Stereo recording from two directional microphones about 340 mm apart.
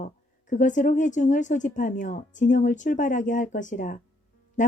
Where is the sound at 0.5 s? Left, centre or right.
Left.